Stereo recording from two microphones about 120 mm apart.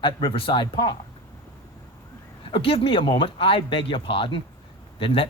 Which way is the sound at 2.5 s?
50° left (ahead or behind).